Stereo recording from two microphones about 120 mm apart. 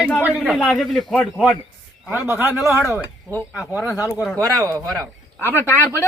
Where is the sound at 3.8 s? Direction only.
25° left (ahead or behind).